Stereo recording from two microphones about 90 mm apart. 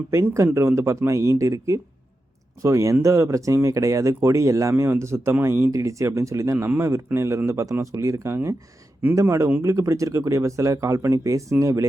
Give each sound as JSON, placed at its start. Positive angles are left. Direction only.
{"t": 0.3, "sound": "speech", "side_deg": -30}
{"t": 4.7, "sound": "speech", "side_deg": -25}